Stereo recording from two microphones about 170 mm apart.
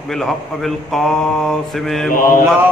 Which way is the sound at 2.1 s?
55° left (ahead or behind).